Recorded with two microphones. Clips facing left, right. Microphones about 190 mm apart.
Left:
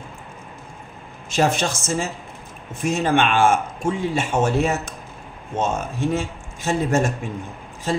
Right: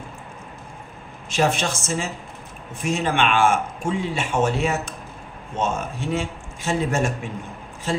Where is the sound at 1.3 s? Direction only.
40° left (ahead or behind).